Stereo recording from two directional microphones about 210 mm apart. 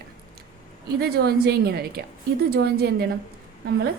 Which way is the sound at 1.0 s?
50° right (ahead or behind).